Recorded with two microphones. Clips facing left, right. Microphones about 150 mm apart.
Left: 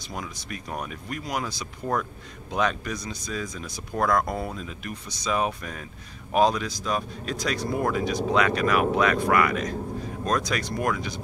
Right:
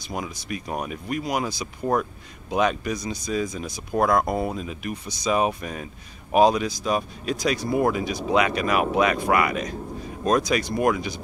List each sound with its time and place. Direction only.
0.0 s speech: 15° right (ahead or behind)